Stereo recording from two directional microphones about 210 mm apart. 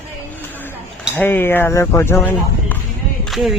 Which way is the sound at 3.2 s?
Centre (ahead or behind).